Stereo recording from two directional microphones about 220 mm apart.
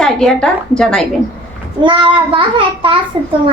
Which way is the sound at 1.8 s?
20° right (ahead or behind).